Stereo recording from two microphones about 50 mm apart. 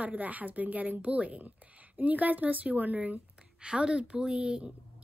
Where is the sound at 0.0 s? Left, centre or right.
Right.